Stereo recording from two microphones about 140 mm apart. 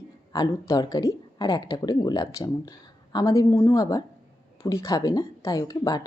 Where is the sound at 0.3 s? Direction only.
25° left (ahead or behind).